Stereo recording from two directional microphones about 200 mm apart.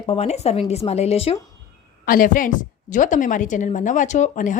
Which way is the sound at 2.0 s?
45° left (ahead or behind).